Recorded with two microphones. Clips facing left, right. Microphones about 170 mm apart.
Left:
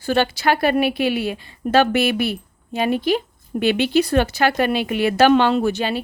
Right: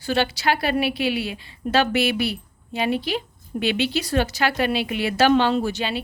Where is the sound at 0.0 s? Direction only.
50° left (ahead or behind).